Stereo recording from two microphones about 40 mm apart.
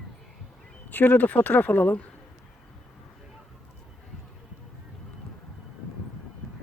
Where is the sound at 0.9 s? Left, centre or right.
Left.